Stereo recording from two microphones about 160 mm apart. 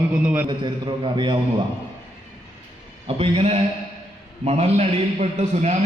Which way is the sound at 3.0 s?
35° right (ahead or behind).